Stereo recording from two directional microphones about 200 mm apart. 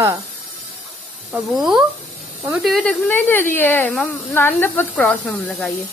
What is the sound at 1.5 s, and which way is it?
Speech, centre (ahead or behind).